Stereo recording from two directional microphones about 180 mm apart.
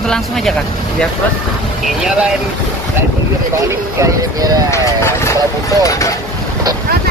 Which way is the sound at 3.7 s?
20° right (ahead or behind).